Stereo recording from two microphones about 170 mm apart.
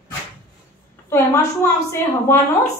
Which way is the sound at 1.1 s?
15° left (ahead or behind).